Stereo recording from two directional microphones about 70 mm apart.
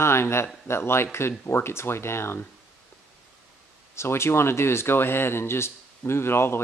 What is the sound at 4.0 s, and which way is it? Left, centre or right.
Speech, left.